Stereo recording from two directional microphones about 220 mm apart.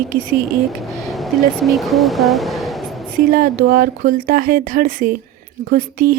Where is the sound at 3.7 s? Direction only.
40° right (ahead or behind).